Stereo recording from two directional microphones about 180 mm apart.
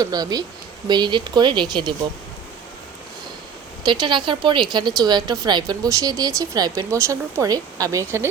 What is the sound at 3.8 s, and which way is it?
A woman's voice, 25° right (ahead or behind).